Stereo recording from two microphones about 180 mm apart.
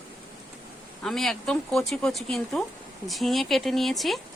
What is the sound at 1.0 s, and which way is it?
A woman's voice, centre (ahead or behind).